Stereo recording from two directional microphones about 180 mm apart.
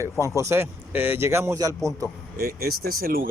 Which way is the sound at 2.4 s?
60° right (ahead or behind).